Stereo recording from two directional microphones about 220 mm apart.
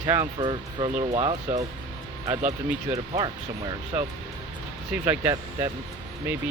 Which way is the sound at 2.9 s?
15° right (ahead or behind).